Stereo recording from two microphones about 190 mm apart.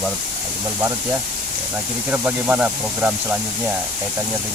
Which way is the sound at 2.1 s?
10° right (ahead or behind).